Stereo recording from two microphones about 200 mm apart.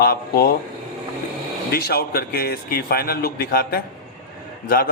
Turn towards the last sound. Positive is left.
turn(degrees=45)  # may be behind; listen again after turning